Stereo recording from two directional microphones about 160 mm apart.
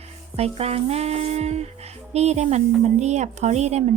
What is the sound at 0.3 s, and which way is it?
Speech, 40° right (ahead or behind).